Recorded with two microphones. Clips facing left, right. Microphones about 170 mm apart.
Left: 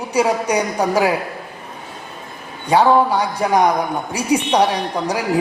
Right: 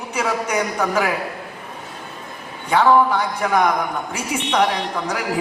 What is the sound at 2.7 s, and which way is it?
A man's voice, 35° left (ahead or behind).